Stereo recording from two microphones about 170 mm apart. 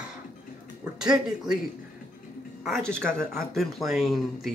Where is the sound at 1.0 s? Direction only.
5° right (ahead or behind).